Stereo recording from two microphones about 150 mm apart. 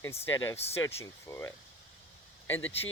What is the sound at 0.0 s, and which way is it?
Speech, 20° left (ahead or behind).